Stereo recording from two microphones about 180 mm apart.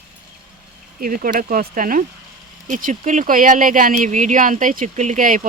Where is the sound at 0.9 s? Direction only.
50° right (ahead or behind).